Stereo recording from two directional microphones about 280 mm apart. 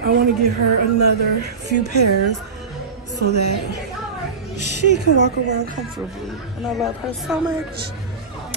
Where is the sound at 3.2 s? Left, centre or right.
Right.